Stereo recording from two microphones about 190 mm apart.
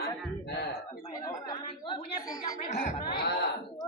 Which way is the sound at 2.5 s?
40° left (ahead or behind).